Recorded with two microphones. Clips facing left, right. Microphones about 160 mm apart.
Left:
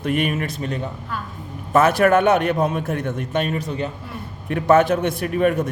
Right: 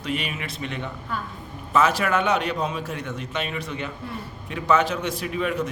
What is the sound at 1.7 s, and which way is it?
A man's voice, 55° left (ahead or behind).